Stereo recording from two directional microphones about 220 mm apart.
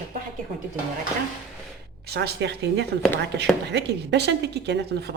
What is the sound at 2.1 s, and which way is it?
A woman's voice, 50° right (ahead or behind).